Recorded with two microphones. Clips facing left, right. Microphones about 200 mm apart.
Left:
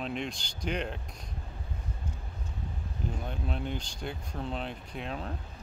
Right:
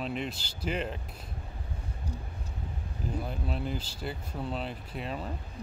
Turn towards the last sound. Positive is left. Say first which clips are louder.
# right 1 dB
turn(degrees=0)  # may be behind; listen again after turning